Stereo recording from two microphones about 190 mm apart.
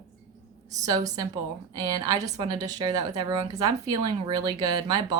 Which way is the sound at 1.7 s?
20° right (ahead or behind).